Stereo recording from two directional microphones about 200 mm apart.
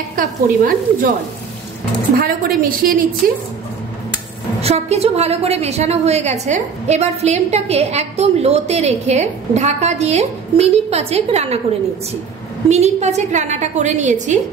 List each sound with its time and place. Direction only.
0.1 s a woman's voice: 45° right (ahead or behind)
2.1 s a woman's voice: 45° right (ahead or behind)
4.6 s a woman's voice: 30° right (ahead or behind)
12.6 s a woman's voice: 35° right (ahead or behind)